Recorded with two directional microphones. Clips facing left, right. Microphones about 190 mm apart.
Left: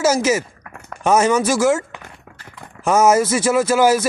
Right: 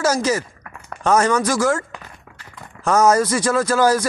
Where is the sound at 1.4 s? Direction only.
25° left (ahead or behind).